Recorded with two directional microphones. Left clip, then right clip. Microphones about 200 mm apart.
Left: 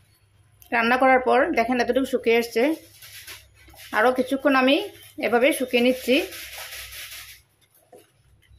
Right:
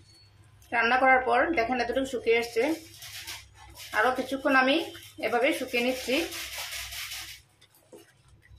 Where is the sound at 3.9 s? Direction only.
40° left (ahead or behind).